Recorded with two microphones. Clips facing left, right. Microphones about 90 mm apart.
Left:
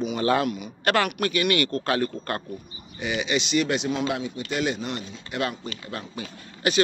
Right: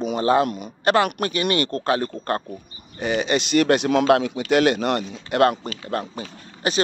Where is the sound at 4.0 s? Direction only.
85° right; by 6.3 s 45° right (ahead or behind).